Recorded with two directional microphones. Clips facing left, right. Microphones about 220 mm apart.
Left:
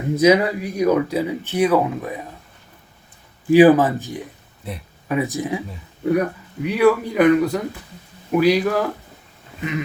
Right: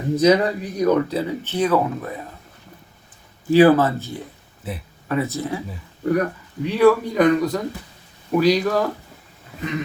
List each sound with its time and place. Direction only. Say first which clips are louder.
0.2 s speech: left 1 dB; 10° left (ahead or behind)
3.5 s speech: left 2 dB; 15° left (ahead or behind)
4.7 s speech: right 1 dB; 5° right (ahead or behind)
5.0 s speech: left 1 dB; 15° left (ahead or behind)